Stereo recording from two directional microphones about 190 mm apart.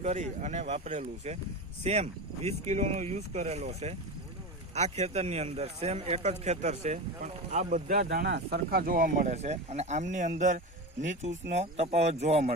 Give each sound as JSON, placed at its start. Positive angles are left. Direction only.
{"t": 0.0, "sound": "speech", "side_deg": -40}